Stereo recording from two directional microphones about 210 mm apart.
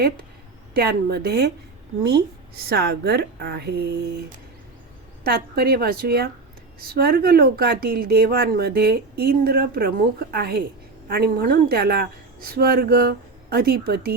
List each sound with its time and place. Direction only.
0.7 s speech: 50° right (ahead or behind)
2.6 s speech: 50° right (ahead or behind)
5.2 s speech: 45° right (ahead or behind)